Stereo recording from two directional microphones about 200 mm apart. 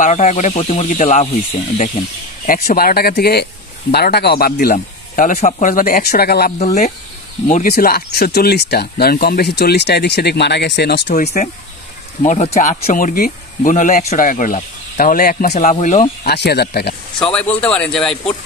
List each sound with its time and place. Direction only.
0.0 s speech: 35° left (ahead or behind)
2.4 s speech: 45° left (ahead or behind)
6.6 s speech: 35° left (ahead or behind)
7.6 s speech: 50° left (ahead or behind)
12.2 s speech: 35° left (ahead or behind)
15.5 s speech: 35° left (ahead or behind)
16.3 s speech: 55° left (ahead or behind)
17.2 s a man's voice: 5° left (ahead or behind)